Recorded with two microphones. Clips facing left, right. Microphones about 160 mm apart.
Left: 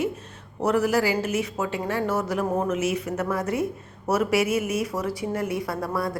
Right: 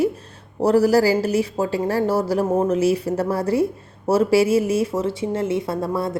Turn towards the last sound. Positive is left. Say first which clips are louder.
# right 4 dB
turn(degrees=-25)  # may be behind; listen again after turning